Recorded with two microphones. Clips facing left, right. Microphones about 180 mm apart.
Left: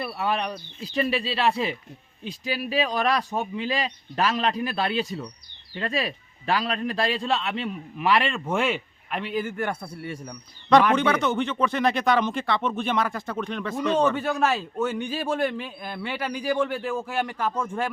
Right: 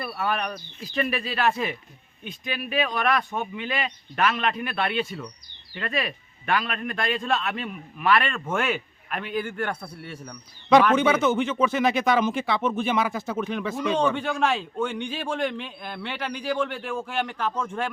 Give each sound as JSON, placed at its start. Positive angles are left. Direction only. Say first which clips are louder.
{"t": 0.2, "sound": "a man's voice", "louder": "even", "side_deg": 25}
{"t": 8.7, "sound": "a man's voice", "louder": "even", "side_deg": 0}
{"t": 10.9, "sound": "speech", "louder": "right 2 dB", "side_deg": -5}
{"t": 14.0, "sound": "a man's voice", "louder": "left 1 dB", "side_deg": 5}